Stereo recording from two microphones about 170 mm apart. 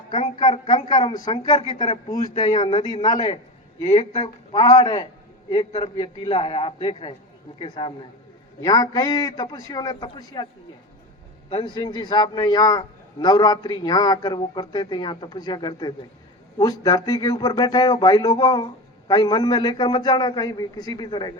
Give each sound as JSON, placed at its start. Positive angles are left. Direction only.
{"t": 0.3, "sound": "a woman's voice", "side_deg": 35}
{"t": 1.0, "sound": "speech", "side_deg": 25}
{"t": 1.5, "sound": "a man's voice", "side_deg": 35}
{"t": 11.5, "sound": "speech", "side_deg": 25}